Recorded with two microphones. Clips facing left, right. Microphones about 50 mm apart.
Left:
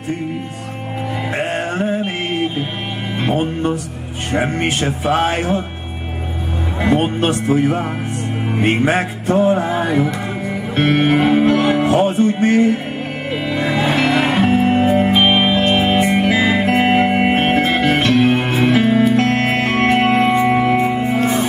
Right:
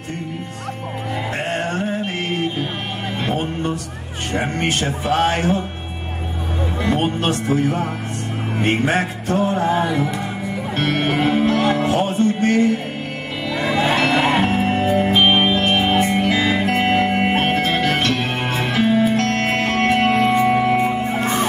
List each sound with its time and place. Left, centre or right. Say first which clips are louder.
1.4 s music: left 3 dB; centre
3.2 s speech: left 5 dB; centre
7.2 s speech: left 3 dB; centre
8.5 s music: left 3 dB; centre
9.3 s speech: left 4 dB; centre
10.8 s speech: left 5 dB; centre
12.1 s music: left 3 dB; centre
13.7 s music: even; centre